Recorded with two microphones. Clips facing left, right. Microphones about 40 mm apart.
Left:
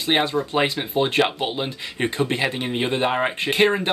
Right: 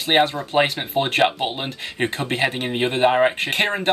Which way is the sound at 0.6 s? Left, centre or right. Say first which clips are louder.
Right 3 dB; right.